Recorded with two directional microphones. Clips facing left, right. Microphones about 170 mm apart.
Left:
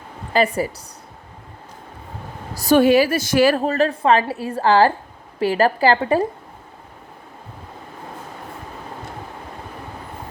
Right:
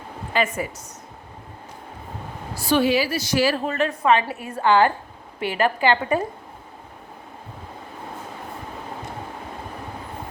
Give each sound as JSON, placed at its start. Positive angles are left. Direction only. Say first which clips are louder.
{"t": 0.3, "sound": "a woman's voice", "louder": "left 5 dB", "side_deg": 35}
{"t": 2.6, "sound": "a woman's voice", "louder": "left 6 dB", "side_deg": 45}
{"t": 3.6, "sound": "a woman's voice", "louder": "left 4 dB", "side_deg": 35}